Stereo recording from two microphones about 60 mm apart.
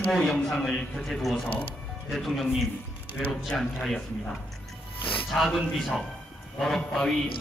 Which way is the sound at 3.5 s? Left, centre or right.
Centre.